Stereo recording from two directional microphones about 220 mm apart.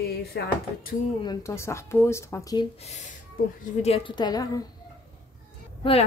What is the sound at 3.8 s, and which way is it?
Speech, 25° left (ahead or behind).